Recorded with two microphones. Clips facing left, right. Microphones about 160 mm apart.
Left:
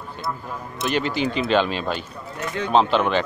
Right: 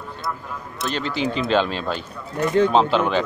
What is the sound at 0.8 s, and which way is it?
Speech, 10° left (ahead or behind).